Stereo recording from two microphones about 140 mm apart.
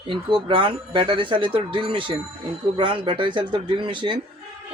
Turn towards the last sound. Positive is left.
turn(degrees=-35)  # may be behind; listen again after turning